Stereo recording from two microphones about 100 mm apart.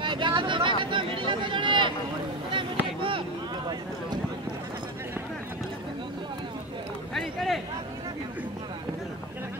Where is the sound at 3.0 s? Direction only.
60° right (ahead or behind).